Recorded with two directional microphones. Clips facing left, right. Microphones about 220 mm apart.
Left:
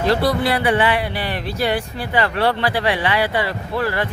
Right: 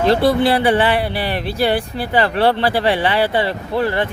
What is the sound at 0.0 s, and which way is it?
Speech, 25° right (ahead or behind).